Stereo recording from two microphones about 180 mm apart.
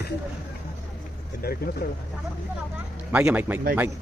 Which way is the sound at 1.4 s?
55° left (ahead or behind).